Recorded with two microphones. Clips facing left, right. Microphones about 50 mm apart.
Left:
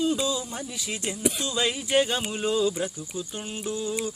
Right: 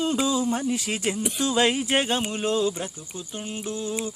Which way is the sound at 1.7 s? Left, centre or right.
Right.